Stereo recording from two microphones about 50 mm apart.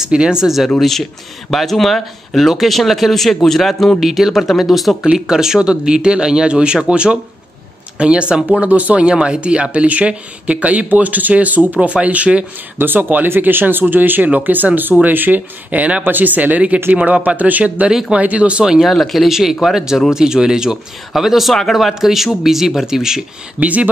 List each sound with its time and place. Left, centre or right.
0.0 s speech: centre
0.7 s speech: centre
8.5 s speech: right
12.7 s speech: right
18.8 s speech: centre
23.6 s speech: right